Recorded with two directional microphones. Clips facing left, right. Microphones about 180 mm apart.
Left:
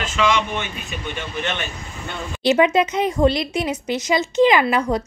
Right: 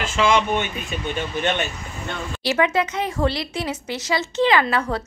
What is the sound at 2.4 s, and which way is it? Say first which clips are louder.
Speech: left 5 dB; 20° left (ahead or behind).